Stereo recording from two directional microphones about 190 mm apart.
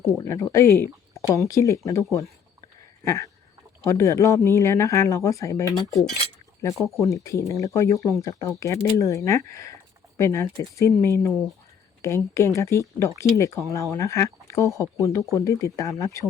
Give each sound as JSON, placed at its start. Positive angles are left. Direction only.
{"t": 0.3, "sound": "speech", "side_deg": 15}
{"t": 3.0, "sound": "a sound", "side_deg": 15}
{"t": 3.8, "sound": "speech", "side_deg": 15}